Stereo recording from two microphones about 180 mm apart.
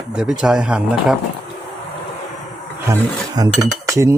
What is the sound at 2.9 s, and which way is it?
Speech, 20° right (ahead or behind).